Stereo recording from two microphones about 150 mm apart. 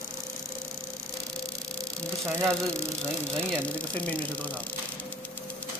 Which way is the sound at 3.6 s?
10° left (ahead or behind).